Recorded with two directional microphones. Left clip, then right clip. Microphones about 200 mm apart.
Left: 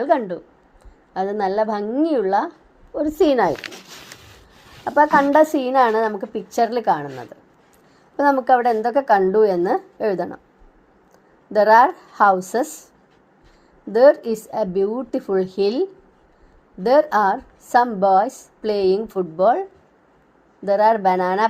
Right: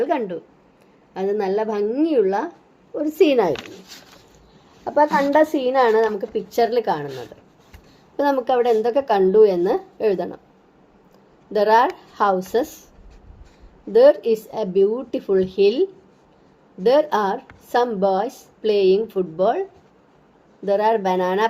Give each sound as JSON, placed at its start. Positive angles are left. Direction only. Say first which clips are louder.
{"t": 0.0, "sound": "a woman's voice", "louder": "left 3 dB", "side_deg": 25}
{"t": 4.9, "sound": "a woman's voice", "louder": "left 2 dB", "side_deg": 25}
{"t": 8.2, "sound": "a woman's voice", "louder": "left 3 dB", "side_deg": 25}
{"t": 11.5, "sound": "a woman's voice", "louder": "left 3 dB", "side_deg": 30}
{"t": 13.9, "sound": "a woman's voice", "louder": "even", "side_deg": 30}
{"t": 20.7, "sound": "speech", "louder": "left 3 dB", "side_deg": 30}